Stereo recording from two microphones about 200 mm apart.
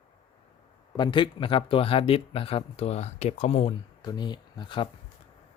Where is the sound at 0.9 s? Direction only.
25° left (ahead or behind).